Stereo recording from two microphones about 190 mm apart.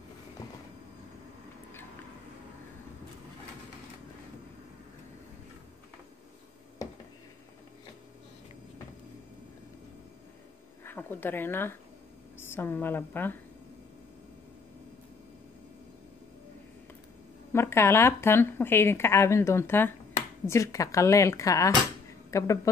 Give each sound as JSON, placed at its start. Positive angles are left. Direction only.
{"t": 10.8, "sound": "a woman's voice", "side_deg": 10}
{"t": 17.5, "sound": "speech", "side_deg": 15}